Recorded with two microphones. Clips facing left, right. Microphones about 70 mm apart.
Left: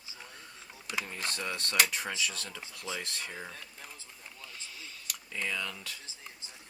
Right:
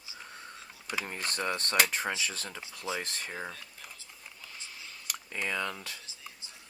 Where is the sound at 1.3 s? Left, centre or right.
Right.